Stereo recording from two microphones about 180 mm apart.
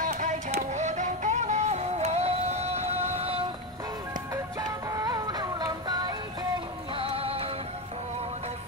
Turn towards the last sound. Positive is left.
turn(degrees=-30)  # may be behind; listen again after turning